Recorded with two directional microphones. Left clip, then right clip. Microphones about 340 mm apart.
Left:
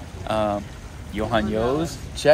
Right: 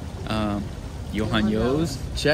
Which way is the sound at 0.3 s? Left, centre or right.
Centre.